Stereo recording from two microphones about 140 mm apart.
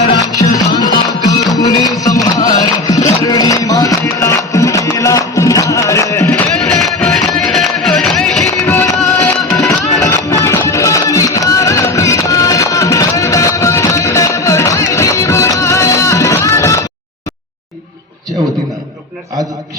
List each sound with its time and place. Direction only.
0.3 s music: 25° left (ahead or behind)
6.7 s music: centre (ahead or behind)
8.6 s music: 15° left (ahead or behind)